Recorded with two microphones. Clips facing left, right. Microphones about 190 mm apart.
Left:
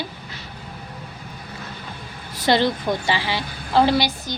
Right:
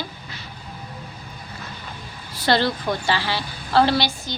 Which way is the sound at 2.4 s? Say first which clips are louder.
Left 2 dB; 20° left (ahead or behind).